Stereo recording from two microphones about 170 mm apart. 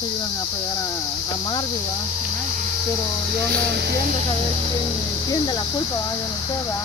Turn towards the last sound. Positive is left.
turn(degrees=20)  # may be behind; listen again after turning